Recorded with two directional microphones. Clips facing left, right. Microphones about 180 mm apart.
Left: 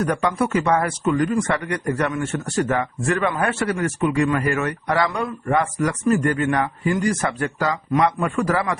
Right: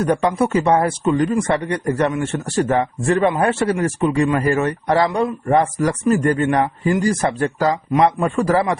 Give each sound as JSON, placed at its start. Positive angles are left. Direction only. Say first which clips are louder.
{"t": 0.0, "sound": "speech", "louder": "right 4 dB", "side_deg": -25}
{"t": 1.3, "sound": "a man's voice", "louder": "right 3 dB", "side_deg": -20}